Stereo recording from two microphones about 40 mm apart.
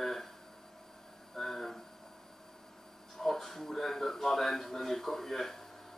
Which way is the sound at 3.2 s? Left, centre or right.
Centre.